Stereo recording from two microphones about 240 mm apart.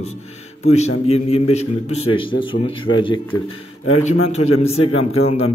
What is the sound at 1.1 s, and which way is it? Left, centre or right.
A man's voice, left.